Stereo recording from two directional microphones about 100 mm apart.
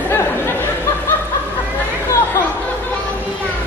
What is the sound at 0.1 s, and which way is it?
Chatter, 20° left (ahead or behind).